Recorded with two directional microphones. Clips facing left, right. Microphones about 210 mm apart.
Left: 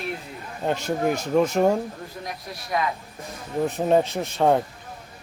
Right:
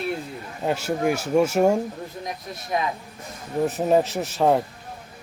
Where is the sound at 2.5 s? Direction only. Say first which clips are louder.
Even; 25° right (ahead or behind).